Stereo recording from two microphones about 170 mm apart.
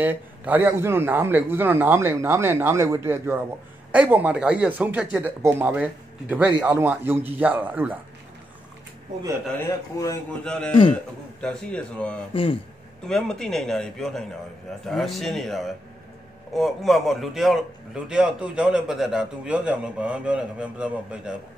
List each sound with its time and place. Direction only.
0.0 s a man's voice: 10° right (ahead or behind)
9.6 s a man's voice: 15° left (ahead or behind)
10.4 s a man's voice: 5° left (ahead or behind)